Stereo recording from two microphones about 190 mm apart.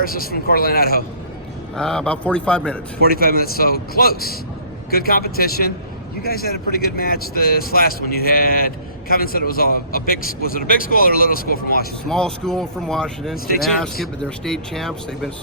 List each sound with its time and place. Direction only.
0.0 s speech: 50° left (ahead or behind)
1.7 s speech: 5° left (ahead or behind)
3.0 s speech: 50° left (ahead or behind)
12.0 s speech: 5° left (ahead or behind)